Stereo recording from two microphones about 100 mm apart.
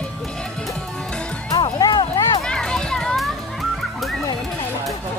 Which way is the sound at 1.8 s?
50° left (ahead or behind).